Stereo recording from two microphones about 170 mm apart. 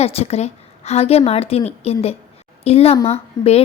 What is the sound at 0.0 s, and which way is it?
A woman's voice, 35° left (ahead or behind).